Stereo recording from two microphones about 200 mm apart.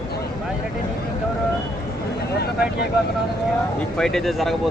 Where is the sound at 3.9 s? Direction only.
Centre (ahead or behind).